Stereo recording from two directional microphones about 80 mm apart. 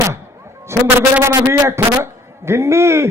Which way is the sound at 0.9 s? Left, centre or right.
Right.